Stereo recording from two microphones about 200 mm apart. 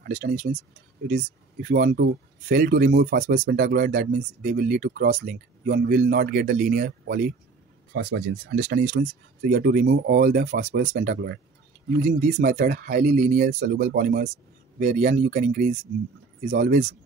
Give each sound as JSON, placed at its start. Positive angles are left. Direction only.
{"t": 0.0, "sound": "speech", "side_deg": -40}
{"t": 7.9, "sound": "speech", "side_deg": -65}
{"t": 8.5, "sound": "speech", "side_deg": -45}
{"t": 11.0, "sound": "speech", "side_deg": -55}
{"t": 12.4, "sound": "speech", "side_deg": -40}